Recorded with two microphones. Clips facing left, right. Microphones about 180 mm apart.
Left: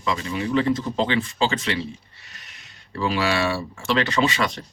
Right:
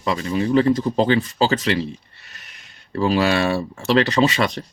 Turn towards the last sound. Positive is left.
turn(degrees=-40)  # may be behind; listen again after turning